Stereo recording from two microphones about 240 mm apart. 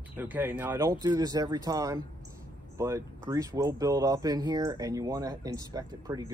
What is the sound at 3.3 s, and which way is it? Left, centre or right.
Speech, centre.